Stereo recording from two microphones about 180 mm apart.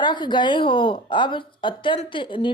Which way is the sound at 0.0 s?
25° left (ahead or behind).